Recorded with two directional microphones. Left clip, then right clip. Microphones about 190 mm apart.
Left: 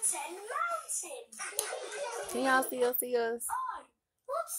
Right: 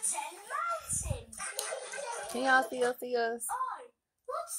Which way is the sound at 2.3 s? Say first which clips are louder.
Right 2 dB; 10° left (ahead or behind).